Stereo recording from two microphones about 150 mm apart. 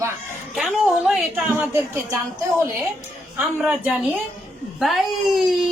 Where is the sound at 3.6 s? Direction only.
5° right (ahead or behind).